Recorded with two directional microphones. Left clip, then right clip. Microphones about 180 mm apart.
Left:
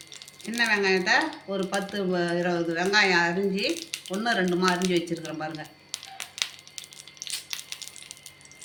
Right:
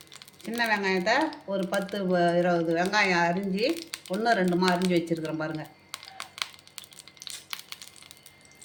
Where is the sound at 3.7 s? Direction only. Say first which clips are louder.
Left 1 dB; 25° right (ahead or behind).